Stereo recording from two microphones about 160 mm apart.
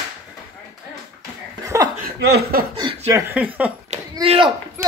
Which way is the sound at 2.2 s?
75° right (ahead or behind).